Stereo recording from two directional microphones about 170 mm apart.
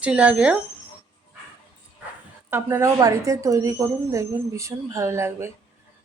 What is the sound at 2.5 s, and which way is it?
Speech, 15° right (ahead or behind).